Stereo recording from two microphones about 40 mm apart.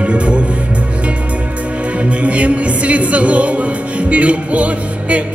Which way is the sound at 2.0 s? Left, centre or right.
Right.